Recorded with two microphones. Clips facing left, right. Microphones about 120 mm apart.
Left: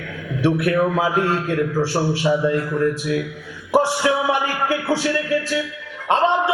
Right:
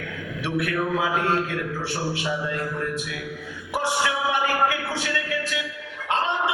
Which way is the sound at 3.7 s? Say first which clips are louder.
Left 7 dB; 35° left (ahead or behind).